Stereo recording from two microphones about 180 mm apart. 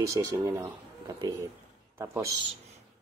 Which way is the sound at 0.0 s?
20° right (ahead or behind).